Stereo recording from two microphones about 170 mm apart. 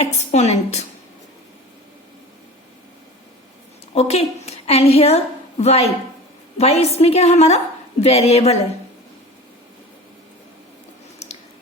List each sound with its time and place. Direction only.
0.0 s a sound: 40° left (ahead or behind)
3.9 s a woman's voice: 40° left (ahead or behind)
11.2 s squish: 40° left (ahead or behind)